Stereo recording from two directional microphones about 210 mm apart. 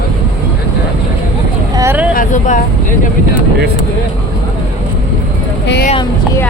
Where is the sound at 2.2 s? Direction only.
35° left (ahead or behind).